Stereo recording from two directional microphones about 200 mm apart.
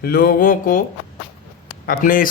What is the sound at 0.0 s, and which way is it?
Speech, 50° left (ahead or behind).